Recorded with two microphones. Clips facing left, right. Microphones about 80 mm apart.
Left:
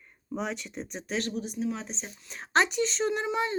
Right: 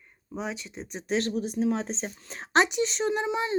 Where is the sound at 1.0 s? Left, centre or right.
Right.